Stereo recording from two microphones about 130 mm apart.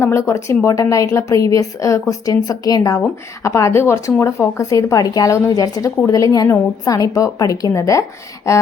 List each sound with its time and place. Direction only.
0.0 s a woman's voice: 25° left (ahead or behind)